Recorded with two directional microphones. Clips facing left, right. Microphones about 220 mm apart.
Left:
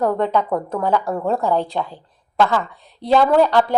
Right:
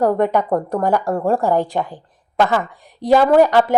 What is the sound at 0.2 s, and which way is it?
A woman's voice, 15° right (ahead or behind).